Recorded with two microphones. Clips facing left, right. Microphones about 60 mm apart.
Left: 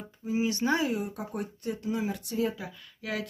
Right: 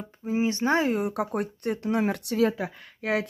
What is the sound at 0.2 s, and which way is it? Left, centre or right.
Speech, right.